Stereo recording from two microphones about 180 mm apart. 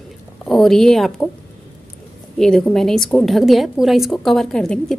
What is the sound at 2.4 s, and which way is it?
A woman's voice, 5° left (ahead or behind).